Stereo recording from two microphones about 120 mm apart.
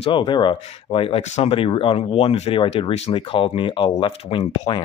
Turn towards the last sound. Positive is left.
turn(degrees=55)  # may be behind; listen again after turning